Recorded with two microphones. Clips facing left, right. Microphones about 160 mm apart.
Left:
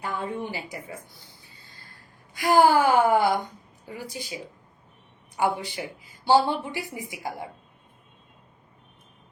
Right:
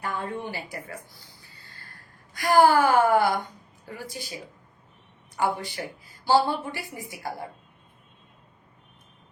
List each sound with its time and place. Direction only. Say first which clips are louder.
0.0 s a sound: left 1 dB; 15° left (ahead or behind)
2.4 s speech: even; 15° left (ahead or behind)
5.4 s speech: left 1 dB; 20° left (ahead or behind)